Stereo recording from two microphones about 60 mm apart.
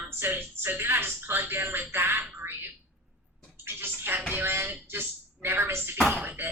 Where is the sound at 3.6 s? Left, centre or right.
Right.